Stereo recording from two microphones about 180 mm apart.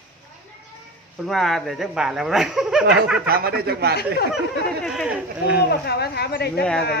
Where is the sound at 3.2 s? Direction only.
55° right (ahead or behind).